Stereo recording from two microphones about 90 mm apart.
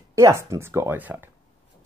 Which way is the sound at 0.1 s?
35° right (ahead or behind).